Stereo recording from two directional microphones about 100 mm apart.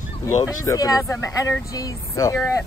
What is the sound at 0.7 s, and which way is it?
Speech, 35° left (ahead or behind).